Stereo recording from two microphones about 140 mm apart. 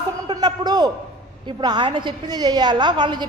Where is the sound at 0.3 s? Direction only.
30° right (ahead or behind).